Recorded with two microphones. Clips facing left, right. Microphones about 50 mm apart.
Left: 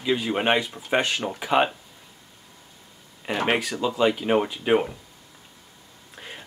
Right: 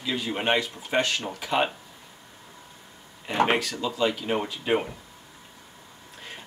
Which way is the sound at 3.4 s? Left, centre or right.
Centre.